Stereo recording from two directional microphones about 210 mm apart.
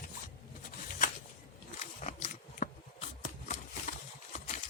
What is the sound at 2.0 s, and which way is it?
Biting, 35° left (ahead or behind).